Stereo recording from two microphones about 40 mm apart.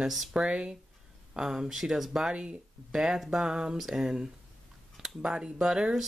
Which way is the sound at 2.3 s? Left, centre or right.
Right.